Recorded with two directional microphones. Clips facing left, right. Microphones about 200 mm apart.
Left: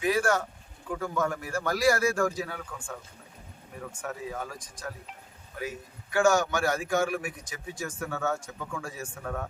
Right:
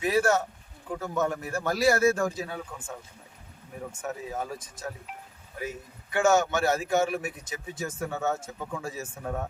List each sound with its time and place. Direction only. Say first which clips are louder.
0.0 s a sound: right 2 dB; 25° right (ahead or behind)
0.9 s a man's voice: right 1 dB; 25° right (ahead or behind)
3.9 s a man's voice: right 2 dB; 25° right (ahead or behind)
6.1 s a man's voice: right 1 dB; 20° right (ahead or behind)